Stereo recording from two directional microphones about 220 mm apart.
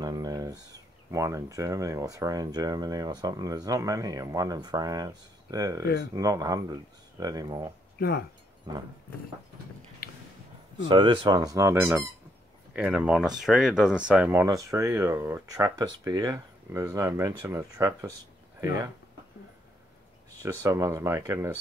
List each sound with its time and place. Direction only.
0.0 s a sound: 15° right (ahead or behind)
1.1 s speech: 15° right (ahead or behind)
8.0 s speech: 45° left (ahead or behind)
10.0 s a sound: 45° left (ahead or behind)
10.9 s speech: 20° right (ahead or behind)
20.4 s speech: 15° right (ahead or behind)